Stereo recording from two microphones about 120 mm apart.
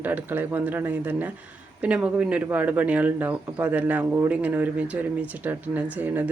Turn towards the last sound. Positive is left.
turn(degrees=-15)  # may be behind; listen again after turning